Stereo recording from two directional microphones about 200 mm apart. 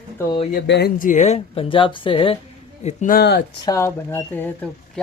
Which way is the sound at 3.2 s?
55° left (ahead or behind).